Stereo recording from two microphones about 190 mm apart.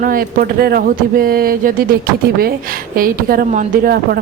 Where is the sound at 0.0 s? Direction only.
50° right (ahead or behind).